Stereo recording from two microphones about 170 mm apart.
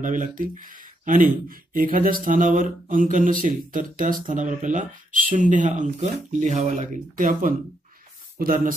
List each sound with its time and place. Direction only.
0.0 s speech: 50° right (ahead or behind)